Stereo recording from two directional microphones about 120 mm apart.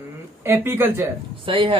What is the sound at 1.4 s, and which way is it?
Speech, 45° right (ahead or behind).